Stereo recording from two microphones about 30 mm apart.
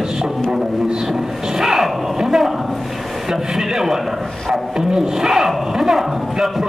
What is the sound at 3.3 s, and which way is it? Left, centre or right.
Speech, centre.